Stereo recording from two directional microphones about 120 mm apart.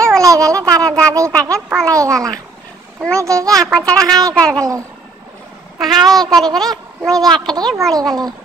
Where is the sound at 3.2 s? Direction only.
25° right (ahead or behind).